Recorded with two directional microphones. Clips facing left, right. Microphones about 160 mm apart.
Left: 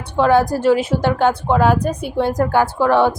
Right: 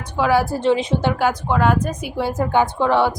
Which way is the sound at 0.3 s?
10° left (ahead or behind).